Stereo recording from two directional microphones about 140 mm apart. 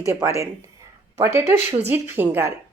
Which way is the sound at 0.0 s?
20° right (ahead or behind).